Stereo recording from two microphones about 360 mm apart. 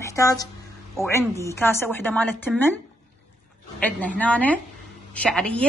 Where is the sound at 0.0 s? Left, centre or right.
Centre.